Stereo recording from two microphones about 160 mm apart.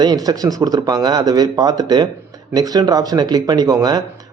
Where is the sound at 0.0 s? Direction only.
25° right (ahead or behind).